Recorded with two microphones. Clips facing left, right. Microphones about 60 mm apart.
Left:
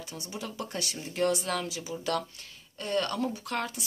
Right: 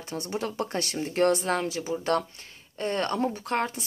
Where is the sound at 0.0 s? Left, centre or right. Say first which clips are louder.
Right 7 dB; right.